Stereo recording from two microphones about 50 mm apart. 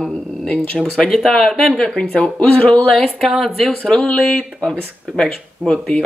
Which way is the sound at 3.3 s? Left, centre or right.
Centre.